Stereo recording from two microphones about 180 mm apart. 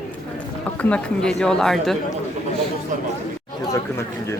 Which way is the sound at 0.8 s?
5° left (ahead or behind).